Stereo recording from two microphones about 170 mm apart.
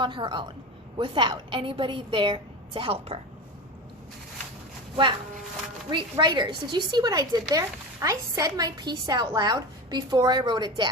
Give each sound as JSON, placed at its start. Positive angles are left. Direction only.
{"t": 0.0, "sound": "a woman's voice", "side_deg": -30}
{"t": 5.9, "sound": "a woman's voice", "side_deg": -25}